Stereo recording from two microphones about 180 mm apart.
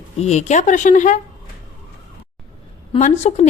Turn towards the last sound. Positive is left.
turn(degrees=40)  # may be behind; listen again after turning